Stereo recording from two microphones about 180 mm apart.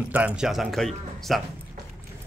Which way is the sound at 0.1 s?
5° right (ahead or behind).